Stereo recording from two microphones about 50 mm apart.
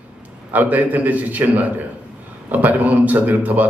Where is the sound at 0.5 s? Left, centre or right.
Right.